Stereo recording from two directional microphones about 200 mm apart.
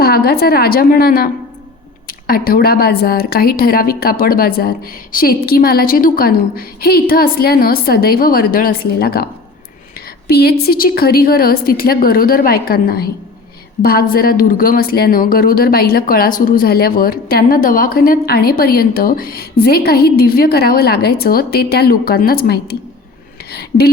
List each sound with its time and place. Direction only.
0.0 s speech: 50° left (ahead or behind)
10.2 s speech: 50° left (ahead or behind)
23.5 s a sound: 50° left (ahead or behind)